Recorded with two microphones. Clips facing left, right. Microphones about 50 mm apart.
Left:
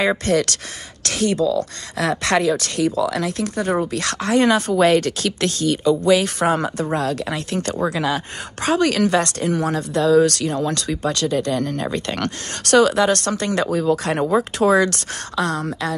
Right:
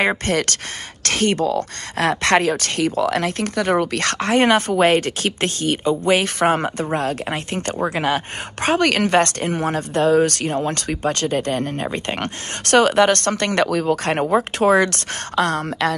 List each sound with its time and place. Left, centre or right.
0.2 s speech: right
12.7 s speech: right